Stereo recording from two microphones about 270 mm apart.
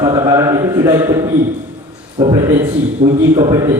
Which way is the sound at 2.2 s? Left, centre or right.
Centre.